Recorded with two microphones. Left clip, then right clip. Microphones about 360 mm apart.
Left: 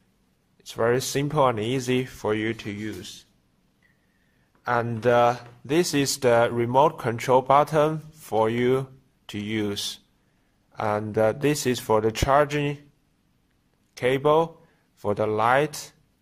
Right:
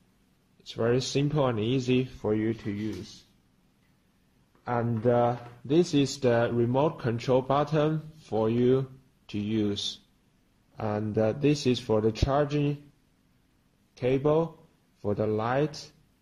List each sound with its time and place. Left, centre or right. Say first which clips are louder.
0.7 s speech: left 4 dB; centre
4.6 s speech: left 5 dB; left
13.9 s speech: left 5 dB; left